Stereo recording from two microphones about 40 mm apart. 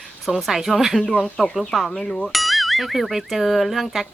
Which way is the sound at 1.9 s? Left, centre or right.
Centre.